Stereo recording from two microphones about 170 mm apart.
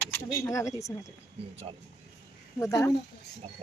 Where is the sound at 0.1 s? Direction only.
20° left (ahead or behind).